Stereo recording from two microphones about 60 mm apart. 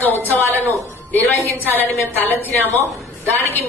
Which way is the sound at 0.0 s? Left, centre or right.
Left.